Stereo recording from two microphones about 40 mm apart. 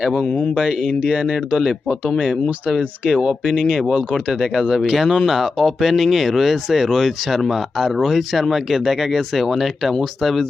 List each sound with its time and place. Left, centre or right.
1.1 s speech: right
1.5 s speech: centre
3.1 s speech: centre
4.5 s speech: centre
4.8 s speech: centre